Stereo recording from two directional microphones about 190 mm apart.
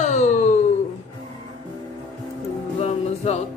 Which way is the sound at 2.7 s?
35° left (ahead or behind).